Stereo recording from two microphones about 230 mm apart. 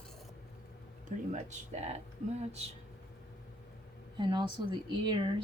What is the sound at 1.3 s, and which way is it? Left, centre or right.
Speech, right.